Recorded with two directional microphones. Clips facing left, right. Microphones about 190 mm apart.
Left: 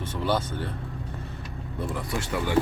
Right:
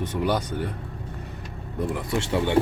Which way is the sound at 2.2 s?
25° right (ahead or behind).